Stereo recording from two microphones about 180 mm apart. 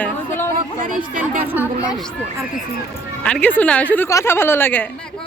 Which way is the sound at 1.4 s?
10° right (ahead or behind).